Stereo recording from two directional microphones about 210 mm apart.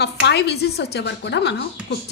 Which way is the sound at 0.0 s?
50° left (ahead or behind).